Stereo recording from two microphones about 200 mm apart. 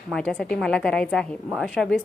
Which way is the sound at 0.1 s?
5° left (ahead or behind).